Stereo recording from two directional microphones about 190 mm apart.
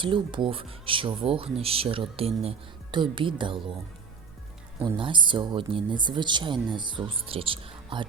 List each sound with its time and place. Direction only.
0.0 s speech: 25° right (ahead or behind)
4.9 s speech: 25° right (ahead or behind)